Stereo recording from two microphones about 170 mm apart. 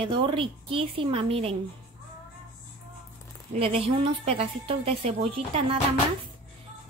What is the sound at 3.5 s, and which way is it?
A woman's voice, 35° right (ahead or behind).